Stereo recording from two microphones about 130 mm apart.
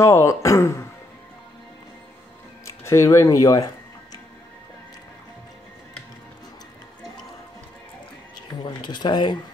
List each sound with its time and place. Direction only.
0.0 s speech: 20° left (ahead or behind)
2.6 s music: 20° left (ahead or behind)
8.5 s a sound: 35° left (ahead or behind)
8.8 s speech: 35° left (ahead or behind)